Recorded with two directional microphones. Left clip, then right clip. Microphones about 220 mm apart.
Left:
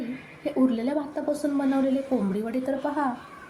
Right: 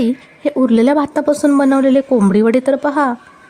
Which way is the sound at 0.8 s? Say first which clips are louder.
Right 15 dB; 50° right (ahead or behind).